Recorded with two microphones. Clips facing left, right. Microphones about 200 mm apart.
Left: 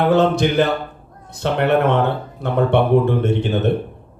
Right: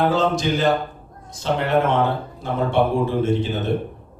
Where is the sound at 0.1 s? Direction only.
60° left (ahead or behind).